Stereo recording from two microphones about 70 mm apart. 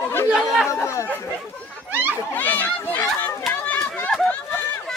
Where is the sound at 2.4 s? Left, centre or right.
Left.